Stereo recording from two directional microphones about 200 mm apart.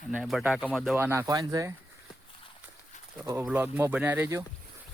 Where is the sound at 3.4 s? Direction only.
10° right (ahead or behind).